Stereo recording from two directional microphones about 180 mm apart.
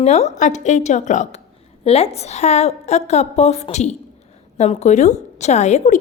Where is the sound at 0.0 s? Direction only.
40° left (ahead or behind).